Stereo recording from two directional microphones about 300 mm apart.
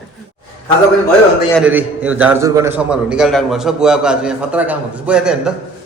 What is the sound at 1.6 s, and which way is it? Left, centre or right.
A man's voice, centre.